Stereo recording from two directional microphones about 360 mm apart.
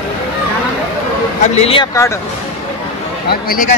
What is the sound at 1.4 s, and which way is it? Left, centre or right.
Speech, centre.